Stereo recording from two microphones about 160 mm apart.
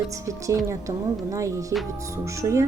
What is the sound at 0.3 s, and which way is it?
Speech, 20° right (ahead or behind).